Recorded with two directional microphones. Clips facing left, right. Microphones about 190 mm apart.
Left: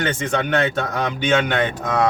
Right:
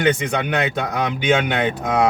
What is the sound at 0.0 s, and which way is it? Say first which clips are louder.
Speech: right 2 dB; 15° right (ahead or behind).